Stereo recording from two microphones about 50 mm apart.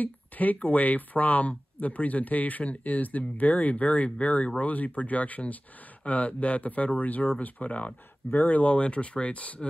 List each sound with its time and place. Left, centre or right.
0.0 s speech: left